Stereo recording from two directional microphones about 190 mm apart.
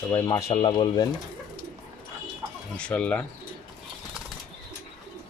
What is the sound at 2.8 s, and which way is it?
Speech, 5° left (ahead or behind).